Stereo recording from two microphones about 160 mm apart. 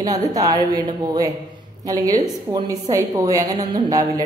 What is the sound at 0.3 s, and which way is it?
A man's voice, 25° right (ahead or behind).